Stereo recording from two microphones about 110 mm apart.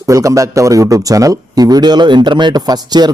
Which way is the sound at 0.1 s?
30° right (ahead or behind).